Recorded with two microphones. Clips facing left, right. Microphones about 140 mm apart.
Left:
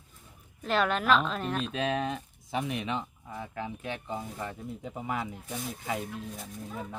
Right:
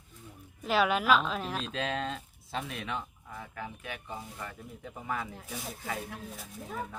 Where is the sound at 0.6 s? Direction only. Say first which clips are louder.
Even; 5° right (ahead or behind).